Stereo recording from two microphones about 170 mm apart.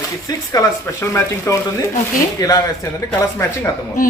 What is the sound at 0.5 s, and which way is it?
Speech, 20° left (ahead or behind).